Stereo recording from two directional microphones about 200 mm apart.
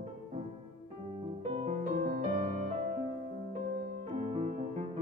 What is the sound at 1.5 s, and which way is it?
Music, 35° right (ahead or behind).